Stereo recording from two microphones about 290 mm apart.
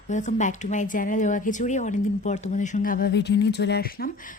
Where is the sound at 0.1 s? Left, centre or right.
Left.